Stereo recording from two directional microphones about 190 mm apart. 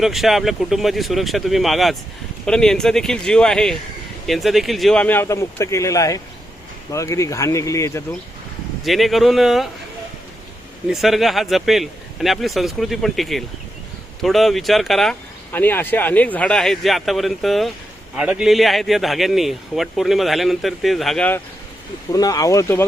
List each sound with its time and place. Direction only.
0.0 s a man's voice: centre (ahead or behind); by 8.0 s 15° left (ahead or behind)
8.8 s a man's voice: centre (ahead or behind)
10.8 s a man's voice: centre (ahead or behind)
22.1 s speech: 20° left (ahead or behind)